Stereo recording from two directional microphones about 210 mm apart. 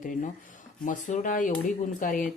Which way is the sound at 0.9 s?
35° left (ahead or behind).